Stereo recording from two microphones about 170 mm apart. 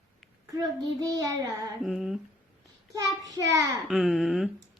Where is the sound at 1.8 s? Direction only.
Centre (ahead or behind).